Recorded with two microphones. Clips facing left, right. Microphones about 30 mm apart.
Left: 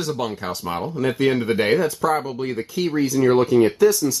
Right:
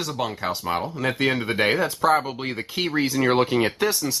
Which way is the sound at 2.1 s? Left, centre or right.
Right.